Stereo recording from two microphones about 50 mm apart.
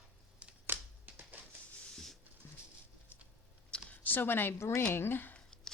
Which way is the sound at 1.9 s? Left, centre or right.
Centre.